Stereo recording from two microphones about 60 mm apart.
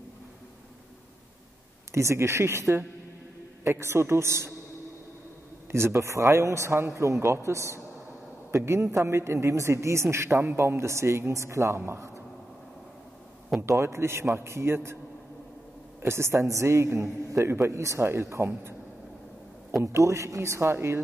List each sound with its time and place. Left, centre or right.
1.9 s a man's voice: right
3.6 s a man's voice: right
5.7 s a man's voice: right
13.7 s a man's voice: right
16.0 s a man's voice: right
19.8 s a man's voice: right